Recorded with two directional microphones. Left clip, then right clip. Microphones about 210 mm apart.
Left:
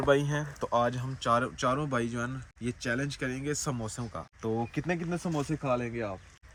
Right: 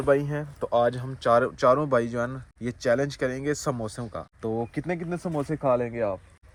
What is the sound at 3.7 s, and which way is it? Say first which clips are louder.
Speech: right 5 dB; centre (ahead or behind).